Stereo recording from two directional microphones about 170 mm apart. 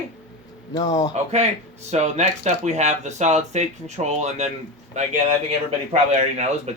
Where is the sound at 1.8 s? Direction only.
40° right (ahead or behind).